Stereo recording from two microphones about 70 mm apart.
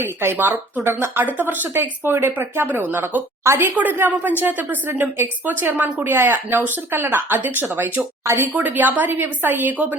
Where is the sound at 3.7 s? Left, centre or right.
Right.